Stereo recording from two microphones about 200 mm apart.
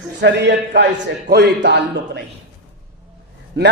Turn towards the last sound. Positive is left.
turn(degrees=-60)  # may be behind; listen again after turning